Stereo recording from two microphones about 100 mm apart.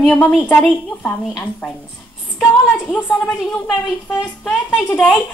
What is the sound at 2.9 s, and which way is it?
A woman's voice, 10° left (ahead or behind).